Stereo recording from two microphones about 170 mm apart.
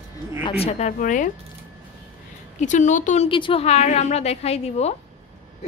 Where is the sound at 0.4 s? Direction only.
35° left (ahead or behind).